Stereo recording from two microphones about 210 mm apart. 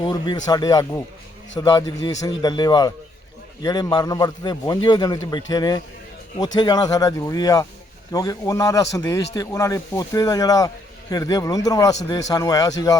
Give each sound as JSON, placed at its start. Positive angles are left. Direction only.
{"t": 0.0, "sound": "a man's voice", "side_deg": 20}